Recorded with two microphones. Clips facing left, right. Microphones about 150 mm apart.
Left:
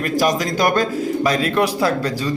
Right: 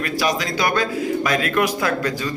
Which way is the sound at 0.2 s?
45° left (ahead or behind).